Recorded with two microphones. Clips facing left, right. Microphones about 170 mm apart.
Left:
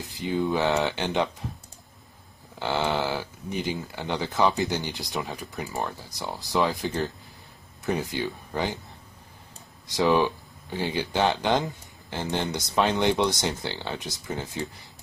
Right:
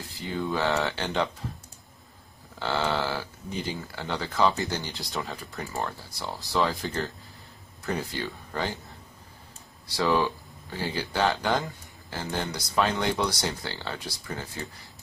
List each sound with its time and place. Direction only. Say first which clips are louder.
0.1 s speech: left 4 dB; 20° left (ahead or behind)
2.6 s speech: left 1 dB; 15° left (ahead or behind)
9.9 s speech: left 3 dB; 20° left (ahead or behind)